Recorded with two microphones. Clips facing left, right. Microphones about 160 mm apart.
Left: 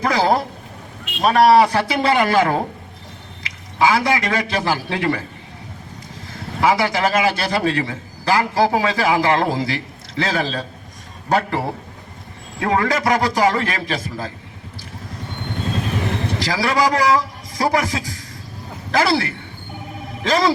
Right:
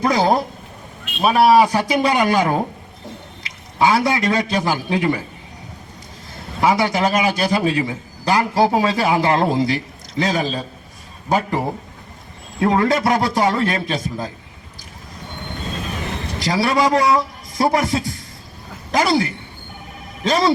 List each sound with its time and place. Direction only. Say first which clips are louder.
0.0 s a man's voice: right 1 dB; 20° right (ahead or behind)
3.8 s a man's voice: even; 25° right (ahead or behind)
6.6 s a man's voice: even; 20° right (ahead or behind)
12.5 s a man's voice: right 3 dB; 25° right (ahead or behind)
16.4 s a man's voice: right 2 dB; 25° right (ahead or behind)